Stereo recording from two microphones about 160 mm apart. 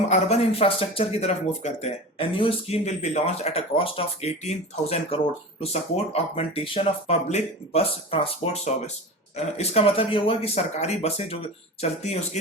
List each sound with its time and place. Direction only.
0.1 s speech: 40° left (ahead or behind)